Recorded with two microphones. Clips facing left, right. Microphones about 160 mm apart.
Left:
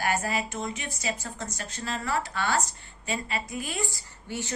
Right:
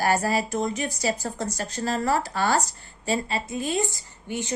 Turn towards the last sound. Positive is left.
turn(degrees=-20)  # may be behind; listen again after turning